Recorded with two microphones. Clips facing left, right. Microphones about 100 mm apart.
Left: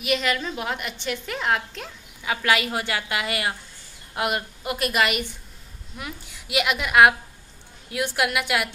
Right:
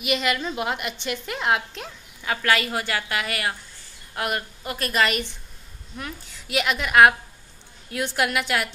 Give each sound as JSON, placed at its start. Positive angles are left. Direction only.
{"t": 0.0, "sound": "a woman's voice", "side_deg": -5}
{"t": 2.2, "sound": "a woman's voice", "side_deg": 15}